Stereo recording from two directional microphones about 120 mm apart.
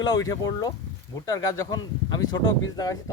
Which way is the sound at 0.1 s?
35° left (ahead or behind).